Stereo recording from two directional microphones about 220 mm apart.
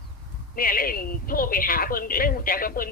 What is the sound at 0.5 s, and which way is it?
A woman's voice, 40° left (ahead or behind).